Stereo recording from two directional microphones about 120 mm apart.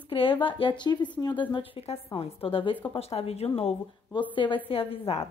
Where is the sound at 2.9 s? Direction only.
60° left (ahead or behind).